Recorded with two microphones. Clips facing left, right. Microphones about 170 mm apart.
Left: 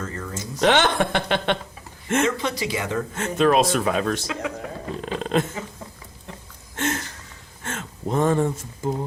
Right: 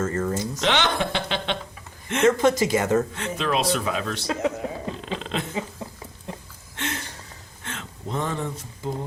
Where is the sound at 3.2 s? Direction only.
45° left (ahead or behind).